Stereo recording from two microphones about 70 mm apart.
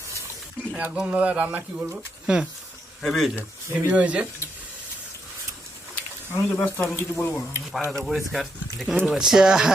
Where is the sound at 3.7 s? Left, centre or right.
Right.